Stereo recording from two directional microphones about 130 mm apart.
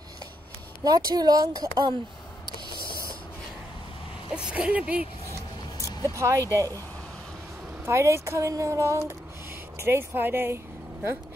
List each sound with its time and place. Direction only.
0.8 s speech: 30° right (ahead or behind)
4.4 s speech: 10° right (ahead or behind)
6.0 s speech: 25° right (ahead or behind)
7.8 s speech: 20° right (ahead or behind)